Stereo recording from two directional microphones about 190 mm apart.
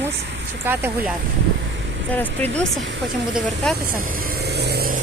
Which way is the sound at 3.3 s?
Centre (ahead or behind).